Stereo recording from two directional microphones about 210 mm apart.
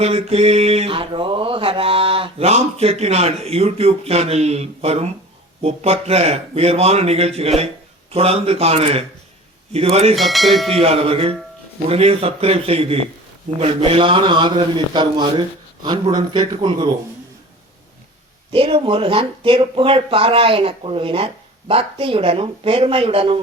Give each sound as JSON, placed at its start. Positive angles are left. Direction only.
{"t": 0.0, "sound": "mantra", "side_deg": -30}
{"t": 10.2, "sound": "speech", "side_deg": 0}
{"t": 10.8, "sound": "mantra", "side_deg": -25}
{"t": 18.5, "sound": "mantra", "side_deg": -25}